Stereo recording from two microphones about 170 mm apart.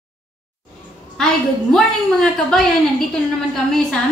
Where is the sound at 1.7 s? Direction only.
Centre (ahead or behind).